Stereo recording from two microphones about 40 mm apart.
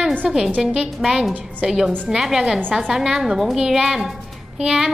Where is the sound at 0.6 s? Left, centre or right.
Centre.